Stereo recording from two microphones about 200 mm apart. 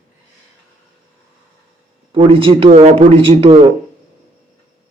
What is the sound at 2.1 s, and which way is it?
A man's voice, 25° right (ahead or behind).